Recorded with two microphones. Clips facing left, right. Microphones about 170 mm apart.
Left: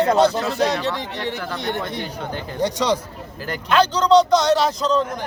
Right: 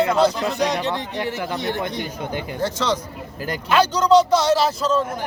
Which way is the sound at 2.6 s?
15° left (ahead or behind).